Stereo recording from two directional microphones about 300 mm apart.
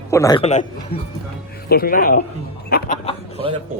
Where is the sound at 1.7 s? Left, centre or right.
Left.